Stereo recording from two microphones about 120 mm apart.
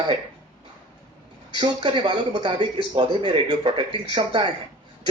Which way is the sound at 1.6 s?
40° right (ahead or behind).